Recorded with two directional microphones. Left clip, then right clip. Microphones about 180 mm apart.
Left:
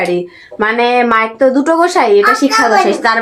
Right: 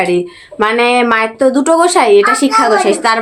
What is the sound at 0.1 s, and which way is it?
Speech, 10° right (ahead or behind).